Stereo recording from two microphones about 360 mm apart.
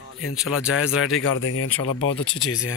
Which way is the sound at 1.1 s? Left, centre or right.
Left.